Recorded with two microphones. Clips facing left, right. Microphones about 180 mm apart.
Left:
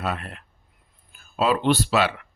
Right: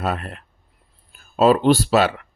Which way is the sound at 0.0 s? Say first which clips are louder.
Right 4 dB; 40° right (ahead or behind).